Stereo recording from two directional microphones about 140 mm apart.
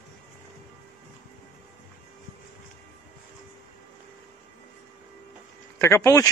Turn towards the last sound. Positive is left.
turn(degrees=20)  # may be behind; listen again after turning